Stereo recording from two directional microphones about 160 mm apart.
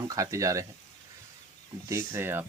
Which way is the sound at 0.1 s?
20° right (ahead or behind).